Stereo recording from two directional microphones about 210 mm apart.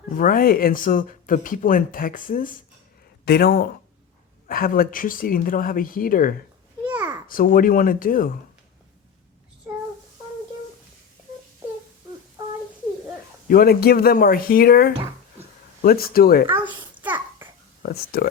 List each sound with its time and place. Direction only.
0.2 s speech: 40° left (ahead or behind)
6.8 s a sound: 10° right (ahead or behind)
7.3 s speech: 40° left (ahead or behind)
13.5 s speech: 45° left (ahead or behind)
17.0 s babbling: 10° right (ahead or behind)
17.8 s speech: 45° left (ahead or behind)